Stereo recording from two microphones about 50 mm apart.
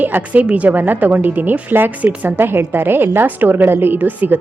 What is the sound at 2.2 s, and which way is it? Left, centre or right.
A woman's voice, right.